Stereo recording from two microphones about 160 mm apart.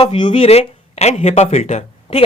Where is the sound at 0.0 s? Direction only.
30° left (ahead or behind).